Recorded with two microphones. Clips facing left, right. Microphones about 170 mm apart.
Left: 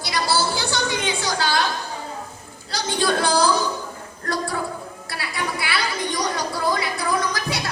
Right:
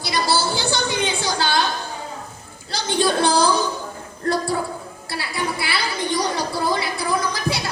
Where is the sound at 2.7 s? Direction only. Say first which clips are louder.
Right 2 dB; 25° right (ahead or behind).